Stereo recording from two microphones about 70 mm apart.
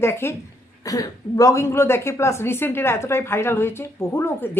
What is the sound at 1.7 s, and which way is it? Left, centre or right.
Speech, left.